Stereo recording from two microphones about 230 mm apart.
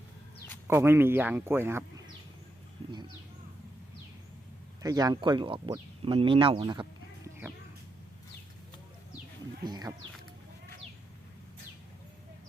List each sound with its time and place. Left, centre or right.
0.7 s speech: centre
4.8 s speech: centre
9.6 s speech: centre